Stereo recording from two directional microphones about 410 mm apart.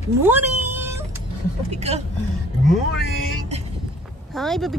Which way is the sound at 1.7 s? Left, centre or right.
Centre.